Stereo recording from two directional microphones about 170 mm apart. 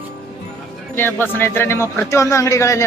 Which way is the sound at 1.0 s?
10° left (ahead or behind).